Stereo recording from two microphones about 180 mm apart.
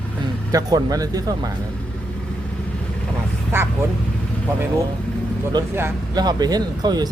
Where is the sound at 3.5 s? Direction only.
15° right (ahead or behind).